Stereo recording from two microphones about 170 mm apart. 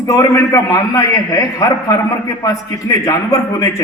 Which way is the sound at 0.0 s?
20° left (ahead or behind).